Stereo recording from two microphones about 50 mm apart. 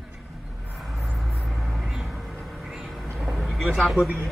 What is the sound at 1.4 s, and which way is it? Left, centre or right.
Music, centre.